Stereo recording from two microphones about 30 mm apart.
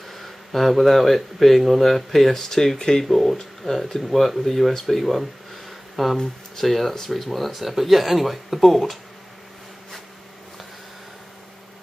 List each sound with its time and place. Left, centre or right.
0.1 s speech: centre
3.1 s speech: centre
5.7 s a sound: centre
6.6 s speech: centre
7.6 s speech: centre